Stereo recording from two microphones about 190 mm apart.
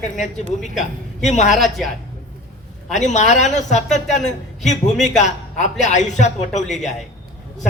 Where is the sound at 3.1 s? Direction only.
40° left (ahead or behind).